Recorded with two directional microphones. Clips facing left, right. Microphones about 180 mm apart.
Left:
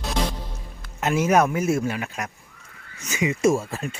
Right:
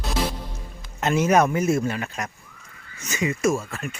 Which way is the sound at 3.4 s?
30° left (ahead or behind).